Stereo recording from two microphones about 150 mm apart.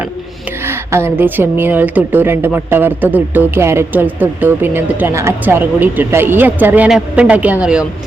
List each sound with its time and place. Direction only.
0.7 s a woman's voice: 15° right (ahead or behind)